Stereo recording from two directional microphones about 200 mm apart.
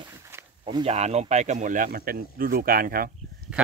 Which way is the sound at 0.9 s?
35° right (ahead or behind).